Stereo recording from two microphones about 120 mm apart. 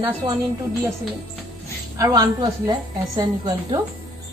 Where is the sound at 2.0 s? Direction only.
30° right (ahead or behind).